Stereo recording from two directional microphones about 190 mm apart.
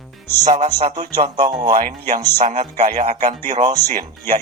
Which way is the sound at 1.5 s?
20° right (ahead or behind).